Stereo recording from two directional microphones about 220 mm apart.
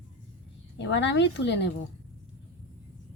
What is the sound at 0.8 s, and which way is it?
Speech, 55° left (ahead or behind).